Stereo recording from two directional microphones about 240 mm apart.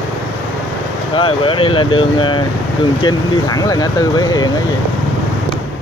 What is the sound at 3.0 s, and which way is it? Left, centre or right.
Speech, centre.